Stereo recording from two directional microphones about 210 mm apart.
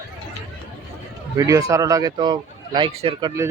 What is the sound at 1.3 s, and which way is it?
Speech, 15° right (ahead or behind).